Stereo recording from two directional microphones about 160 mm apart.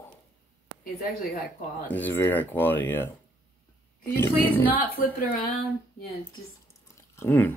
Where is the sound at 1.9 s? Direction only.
10° left (ahead or behind).